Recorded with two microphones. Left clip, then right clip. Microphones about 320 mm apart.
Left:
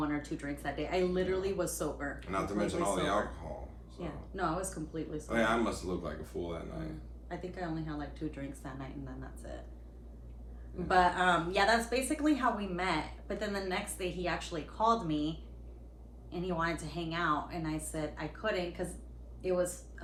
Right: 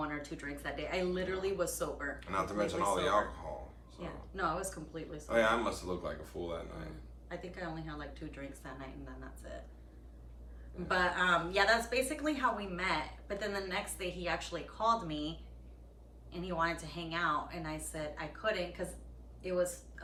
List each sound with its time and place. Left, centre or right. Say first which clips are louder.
0.0 s a woman's voice: left 3 dB; centre
2.1 s speech: right 2 dB; centre
4.0 s a woman's voice: left 1 dB; centre
5.2 s speech: right 1 dB; centre
7.3 s a woman's voice: left 3 dB; centre
10.8 s a woman's voice: left 4 dB; centre
16.3 s a woman's voice: even; centre